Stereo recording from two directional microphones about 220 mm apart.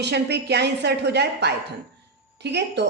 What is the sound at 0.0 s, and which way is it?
A woman's voice, 50° right (ahead or behind).